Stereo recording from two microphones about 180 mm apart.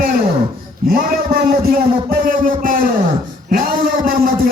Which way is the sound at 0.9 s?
55° right (ahead or behind).